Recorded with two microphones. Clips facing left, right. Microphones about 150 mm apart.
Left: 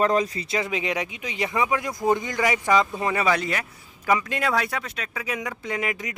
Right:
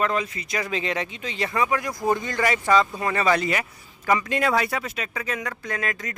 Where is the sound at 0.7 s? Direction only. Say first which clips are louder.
Even; 15° left (ahead or behind).